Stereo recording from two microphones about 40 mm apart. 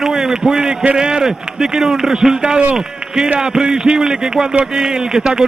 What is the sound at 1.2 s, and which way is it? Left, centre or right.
A man's voice, centre.